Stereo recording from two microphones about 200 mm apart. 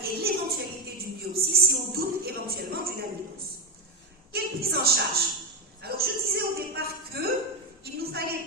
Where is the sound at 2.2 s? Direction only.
50° right (ahead or behind).